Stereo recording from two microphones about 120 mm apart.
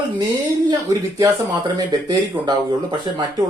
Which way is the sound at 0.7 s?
30° right (ahead or behind).